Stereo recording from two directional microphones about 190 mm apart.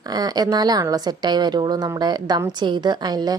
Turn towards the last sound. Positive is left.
turn(degrees=-20)  # may be behind; listen again after turning